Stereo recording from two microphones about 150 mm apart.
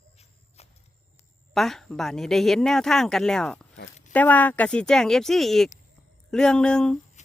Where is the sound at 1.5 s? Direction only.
Centre (ahead or behind).